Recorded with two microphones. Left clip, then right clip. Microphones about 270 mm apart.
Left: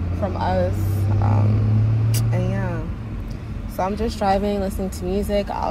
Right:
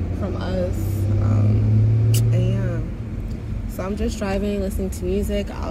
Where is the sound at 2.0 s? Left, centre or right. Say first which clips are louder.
Even; centre.